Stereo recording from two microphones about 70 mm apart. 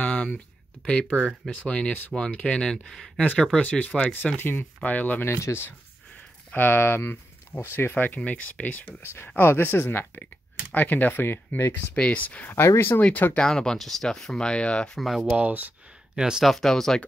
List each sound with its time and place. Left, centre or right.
0.0 s a sound: left
1.0 s speech: centre
3.2 s speech: centre
4.4 s speech: left
11.7 s speech: centre
12.6 s speech: left
13.0 s speech: left
13.4 s speech: centre
15.0 s speech: centre
15.3 s speech: right
16.2 s speech: centre
16.5 s speech: centre